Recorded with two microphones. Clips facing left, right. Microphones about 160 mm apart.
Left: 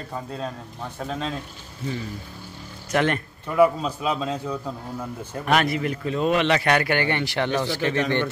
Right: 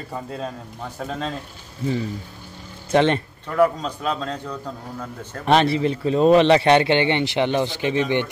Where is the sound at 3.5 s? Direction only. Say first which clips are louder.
Even; 10° left (ahead or behind).